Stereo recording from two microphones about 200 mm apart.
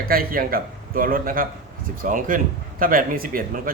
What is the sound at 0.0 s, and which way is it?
A man's voice, 45° right (ahead or behind).